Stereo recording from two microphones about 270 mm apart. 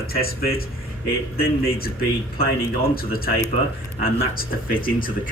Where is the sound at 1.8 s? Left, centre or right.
Left.